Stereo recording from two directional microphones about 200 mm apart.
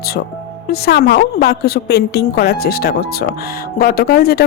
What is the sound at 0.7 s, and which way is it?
A woman's voice, 55° left (ahead or behind).